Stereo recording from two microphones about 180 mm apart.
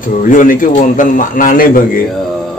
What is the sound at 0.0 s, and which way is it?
A man's voice, 45° left (ahead or behind).